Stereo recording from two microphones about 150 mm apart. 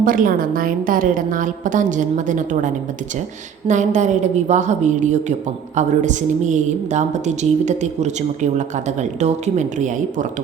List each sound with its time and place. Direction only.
0.0 s a woman's voice: 70° right (ahead or behind)